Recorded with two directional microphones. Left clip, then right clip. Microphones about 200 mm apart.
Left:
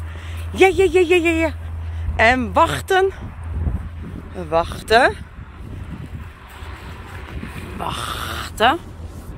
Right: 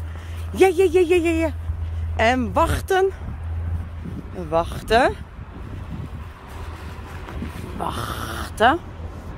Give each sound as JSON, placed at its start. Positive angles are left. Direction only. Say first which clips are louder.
{"t": 0.5, "sound": "speech", "louder": "left 2 dB", "side_deg": -10}
{"t": 4.4, "sound": "speech", "louder": "left 3 dB", "side_deg": 5}
{"t": 7.8, "sound": "speech", "louder": "left 2 dB", "side_deg": 15}